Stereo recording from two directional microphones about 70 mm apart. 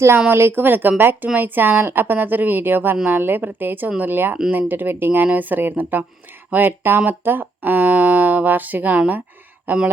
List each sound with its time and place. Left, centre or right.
0.3 s a woman's voice: right